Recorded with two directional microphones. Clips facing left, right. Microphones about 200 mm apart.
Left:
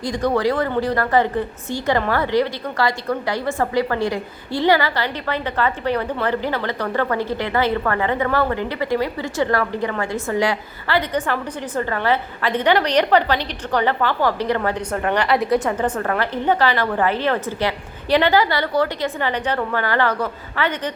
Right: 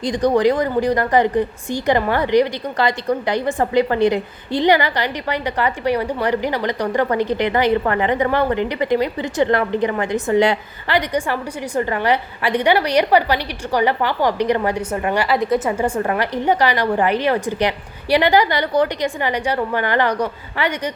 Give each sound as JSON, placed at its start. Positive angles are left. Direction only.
{"t": 0.0, "sound": "a woman's voice", "side_deg": -20}
{"t": 16.0, "sound": "a woman's voice", "side_deg": -15}